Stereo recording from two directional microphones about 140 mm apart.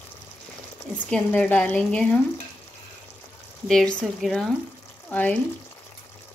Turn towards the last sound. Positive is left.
turn(degrees=10)  # may be behind; listen again after turning